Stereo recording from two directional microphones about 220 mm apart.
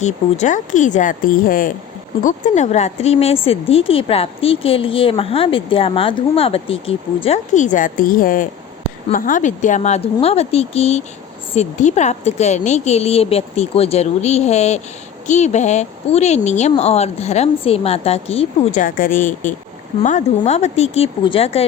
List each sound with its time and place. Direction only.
0.0 s speech: 35° left (ahead or behind)